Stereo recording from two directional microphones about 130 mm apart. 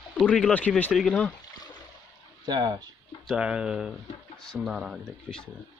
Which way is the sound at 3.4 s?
5° right (ahead or behind).